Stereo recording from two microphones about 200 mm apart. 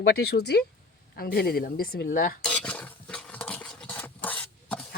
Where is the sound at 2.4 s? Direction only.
5° left (ahead or behind).